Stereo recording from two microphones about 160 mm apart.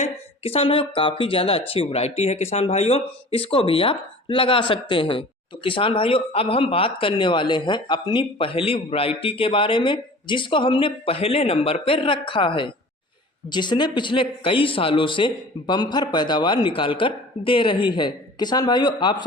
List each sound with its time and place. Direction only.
0.0 s speech: 40° left (ahead or behind)